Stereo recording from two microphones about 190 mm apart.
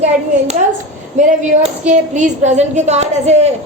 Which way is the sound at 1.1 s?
40° right (ahead or behind).